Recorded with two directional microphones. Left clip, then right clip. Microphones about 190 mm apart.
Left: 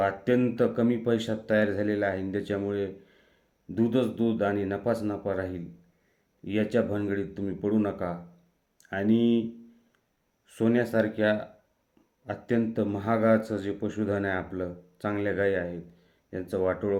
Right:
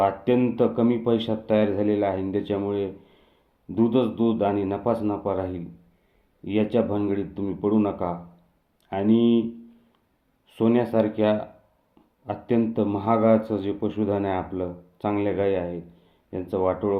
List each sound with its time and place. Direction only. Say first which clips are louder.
0.0 s speech: right 4 dB; 25° left (ahead or behind)
10.5 s speech: right 4 dB; 25° left (ahead or behind)